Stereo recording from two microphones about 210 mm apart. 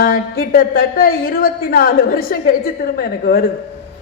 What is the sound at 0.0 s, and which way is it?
A woman's voice, 45° left (ahead or behind).